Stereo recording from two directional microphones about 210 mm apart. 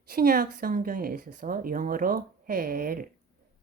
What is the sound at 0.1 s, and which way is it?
A woman's voice, 45° right (ahead or behind).